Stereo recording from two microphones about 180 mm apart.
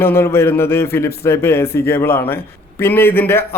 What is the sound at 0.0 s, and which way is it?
A man's voice, 15° left (ahead or behind).